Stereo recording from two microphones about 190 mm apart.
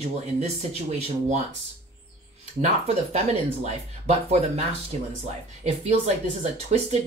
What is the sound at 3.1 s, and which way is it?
Speech, 35° right (ahead or behind).